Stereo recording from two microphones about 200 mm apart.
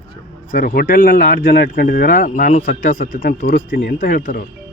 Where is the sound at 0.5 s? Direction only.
45° left (ahead or behind).